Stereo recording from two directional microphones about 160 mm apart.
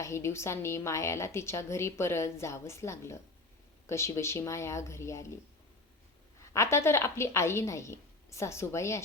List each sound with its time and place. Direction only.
0.0 s a woman's voice: 15° left (ahead or behind)
6.5 s a woman's voice: 15° left (ahead or behind)